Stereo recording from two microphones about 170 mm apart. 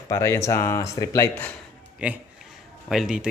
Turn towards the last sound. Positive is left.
turn(degrees=-5)  # may be behind; listen again after turning